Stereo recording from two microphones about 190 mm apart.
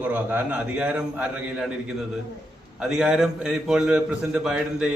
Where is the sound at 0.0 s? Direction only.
10° right (ahead or behind).